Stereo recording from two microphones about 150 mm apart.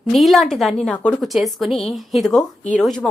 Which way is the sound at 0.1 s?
Centre (ahead or behind).